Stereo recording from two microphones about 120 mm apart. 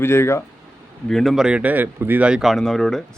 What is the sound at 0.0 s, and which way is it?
Speech, 20° left (ahead or behind).